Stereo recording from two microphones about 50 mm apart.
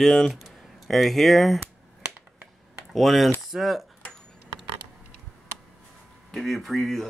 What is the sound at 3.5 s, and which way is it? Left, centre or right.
Cutlery, centre.